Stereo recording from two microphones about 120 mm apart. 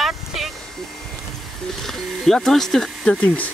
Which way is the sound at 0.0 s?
Centre (ahead or behind).